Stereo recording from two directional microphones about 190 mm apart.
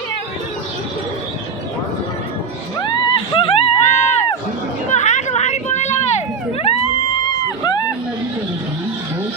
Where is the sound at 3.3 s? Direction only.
30° left (ahead or behind).